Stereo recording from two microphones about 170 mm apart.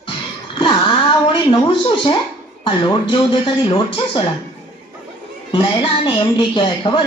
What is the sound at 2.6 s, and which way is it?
A woman's voice, 30° left (ahead or behind).